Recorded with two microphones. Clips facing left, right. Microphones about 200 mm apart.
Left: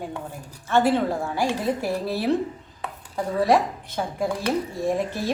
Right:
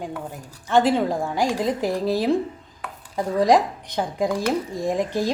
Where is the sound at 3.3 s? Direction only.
15° right (ahead or behind).